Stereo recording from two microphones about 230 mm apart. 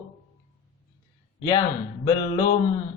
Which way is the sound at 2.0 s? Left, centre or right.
Centre.